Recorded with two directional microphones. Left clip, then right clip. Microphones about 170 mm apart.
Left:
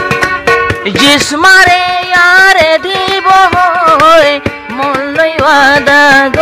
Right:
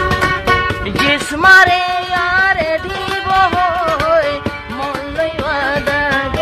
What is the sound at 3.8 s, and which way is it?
Music, 20° left (ahead or behind).